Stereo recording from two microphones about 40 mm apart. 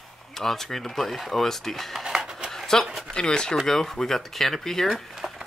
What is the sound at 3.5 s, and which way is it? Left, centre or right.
Speech, centre.